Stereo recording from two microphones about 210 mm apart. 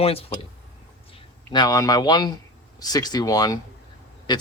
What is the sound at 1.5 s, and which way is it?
Speech, 20° left (ahead or behind).